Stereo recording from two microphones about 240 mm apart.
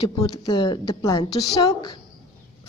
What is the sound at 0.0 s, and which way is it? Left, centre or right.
A woman's voice, centre.